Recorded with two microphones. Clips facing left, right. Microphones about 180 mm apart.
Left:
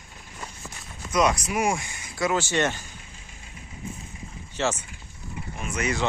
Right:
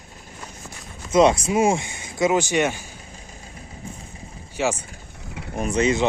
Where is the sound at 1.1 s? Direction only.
25° right (ahead or behind); by 2.8 s 10° right (ahead or behind).